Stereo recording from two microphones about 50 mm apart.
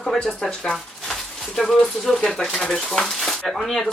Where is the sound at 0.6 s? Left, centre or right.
Centre.